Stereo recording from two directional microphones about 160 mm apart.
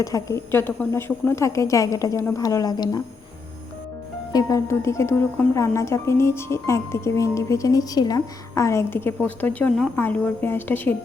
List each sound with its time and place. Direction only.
0.0 s speech: 20° left (ahead or behind)
4.3 s a woman's voice: 20° left (ahead or behind)